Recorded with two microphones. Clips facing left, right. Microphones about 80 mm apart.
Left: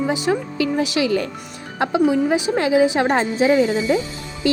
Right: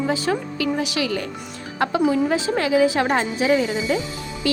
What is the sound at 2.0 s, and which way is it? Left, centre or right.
Speech, centre.